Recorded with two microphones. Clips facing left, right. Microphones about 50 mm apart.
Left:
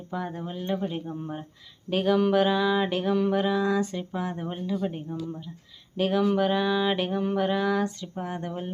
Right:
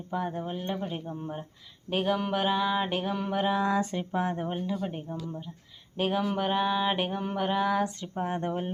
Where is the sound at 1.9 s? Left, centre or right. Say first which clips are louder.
Left 5 dB; centre.